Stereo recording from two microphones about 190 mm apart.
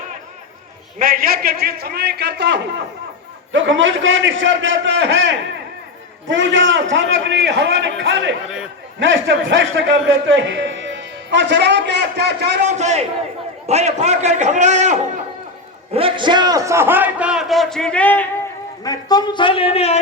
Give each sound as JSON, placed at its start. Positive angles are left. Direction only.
{"t": 0.9, "sound": "a man's voice", "side_deg": -50}
{"t": 3.5, "sound": "a man's voice", "side_deg": -80}
{"t": 12.6, "sound": "a man's voice", "side_deg": -35}
{"t": 18.9, "sound": "speech", "side_deg": 20}